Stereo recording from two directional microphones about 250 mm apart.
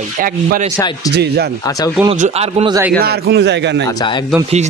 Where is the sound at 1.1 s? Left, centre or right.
Right.